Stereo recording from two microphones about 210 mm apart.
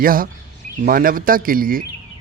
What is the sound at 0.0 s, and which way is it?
A man's voice, 45° right (ahead or behind).